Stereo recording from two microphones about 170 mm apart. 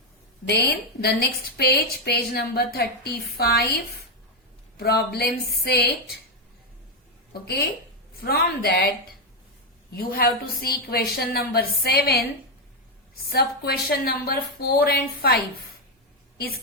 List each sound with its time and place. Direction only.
0.4 s a woman's voice: 75° left (ahead or behind)
4.8 s a woman's voice: 70° left (ahead or behind)
7.4 s a woman's voice: 70° left (ahead or behind)
9.9 s a woman's voice: 60° left (ahead or behind)
13.2 s a woman's voice: 65° left (ahead or behind)